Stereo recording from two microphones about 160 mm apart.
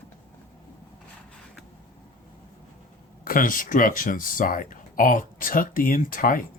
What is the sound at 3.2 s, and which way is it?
Speech, 60° left (ahead or behind).